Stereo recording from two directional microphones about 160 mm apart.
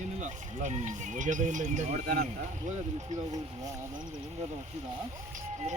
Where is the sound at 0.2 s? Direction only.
50° right (ahead or behind).